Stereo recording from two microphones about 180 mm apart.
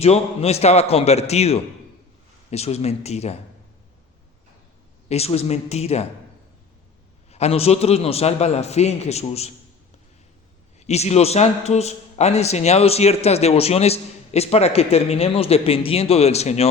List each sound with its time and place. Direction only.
0.0 s a man's voice: 35° left (ahead or behind)
5.0 s a man's voice: 35° left (ahead or behind)
7.3 s a man's voice: 35° left (ahead or behind)
10.8 s a man's voice: 35° left (ahead or behind)